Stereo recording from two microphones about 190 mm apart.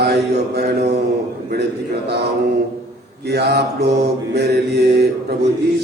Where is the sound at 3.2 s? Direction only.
60° right (ahead or behind).